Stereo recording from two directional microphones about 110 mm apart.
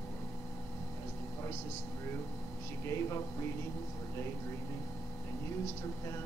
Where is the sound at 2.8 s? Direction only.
25° left (ahead or behind).